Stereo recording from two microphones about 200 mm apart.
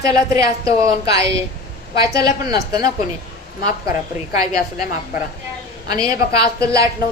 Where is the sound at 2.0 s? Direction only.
20° right (ahead or behind).